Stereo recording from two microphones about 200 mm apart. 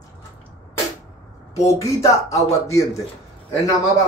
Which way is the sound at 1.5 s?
15° left (ahead or behind).